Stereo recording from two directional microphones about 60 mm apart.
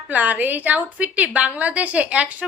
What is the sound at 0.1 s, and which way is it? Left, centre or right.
A woman's voice, right.